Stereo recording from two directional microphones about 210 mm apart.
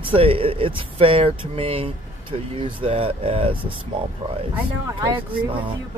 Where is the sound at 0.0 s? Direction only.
25° right (ahead or behind).